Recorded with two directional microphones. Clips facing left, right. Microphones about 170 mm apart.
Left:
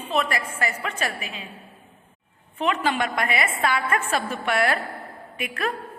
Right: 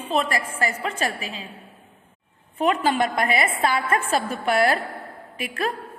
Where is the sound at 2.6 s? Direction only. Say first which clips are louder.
Right 3 dB; 35° right (ahead or behind).